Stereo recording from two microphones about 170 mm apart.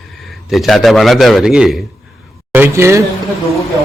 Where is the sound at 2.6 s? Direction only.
15° right (ahead or behind).